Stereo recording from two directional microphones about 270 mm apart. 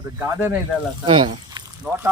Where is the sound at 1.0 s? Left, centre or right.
Centre.